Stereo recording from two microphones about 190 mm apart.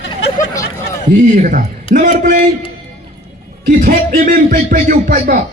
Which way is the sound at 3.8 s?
45° right (ahead or behind).